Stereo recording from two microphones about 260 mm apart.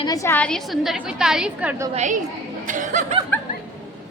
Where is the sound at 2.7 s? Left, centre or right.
Right.